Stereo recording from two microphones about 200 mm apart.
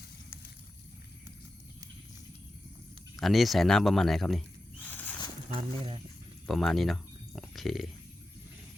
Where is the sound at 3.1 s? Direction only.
Centre (ahead or behind).